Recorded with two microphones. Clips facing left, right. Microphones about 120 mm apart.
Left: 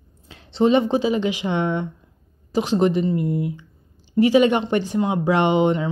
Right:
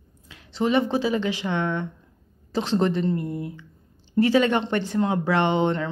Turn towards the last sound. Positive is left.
turn(degrees=15)  # may be behind; listen again after turning